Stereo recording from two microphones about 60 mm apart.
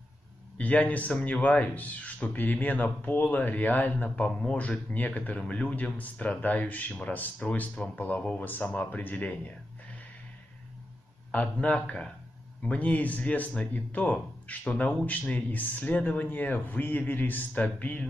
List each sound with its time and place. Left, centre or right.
0.6 s a man's voice: left
11.3 s a man's voice: left